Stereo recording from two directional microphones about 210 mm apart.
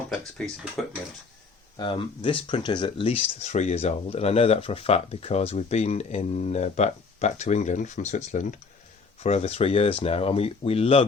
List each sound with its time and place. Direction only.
0.4 s speech: 5° left (ahead or behind)
1.7 s speech: 25° left (ahead or behind)